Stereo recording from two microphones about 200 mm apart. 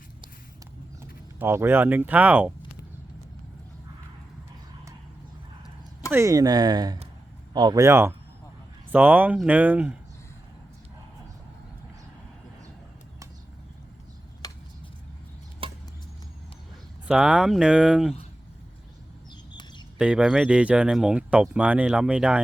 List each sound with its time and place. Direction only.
1.4 s speech: 10° right (ahead or behind)
6.1 s speech: 15° right (ahead or behind)
14.4 s chop: 20° left (ahead or behind)
15.6 s chop: 25° right (ahead or behind)
17.1 s speech: 5° right (ahead or behind)
20.0 s speech: 5° right (ahead or behind)